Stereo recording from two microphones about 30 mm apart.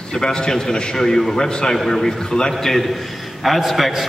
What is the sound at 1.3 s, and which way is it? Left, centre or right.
A man's voice, left.